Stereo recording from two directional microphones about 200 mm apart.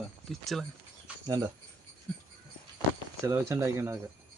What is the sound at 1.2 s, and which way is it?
Speech, 20° right (ahead or behind).